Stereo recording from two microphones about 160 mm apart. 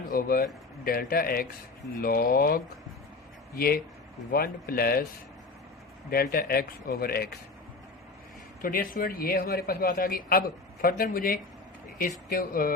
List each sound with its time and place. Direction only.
0.1 s a man's voice: 65° left (ahead or behind)
6.1 s speech: 70° left (ahead or behind)
8.6 s a man's voice: 60° left (ahead or behind)